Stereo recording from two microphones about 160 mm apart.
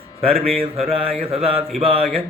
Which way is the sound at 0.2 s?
35° right (ahead or behind).